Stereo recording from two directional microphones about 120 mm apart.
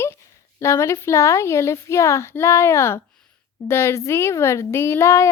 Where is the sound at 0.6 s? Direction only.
25° left (ahead or behind).